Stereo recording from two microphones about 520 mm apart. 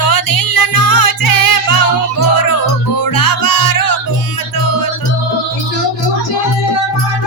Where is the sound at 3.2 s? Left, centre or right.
Left.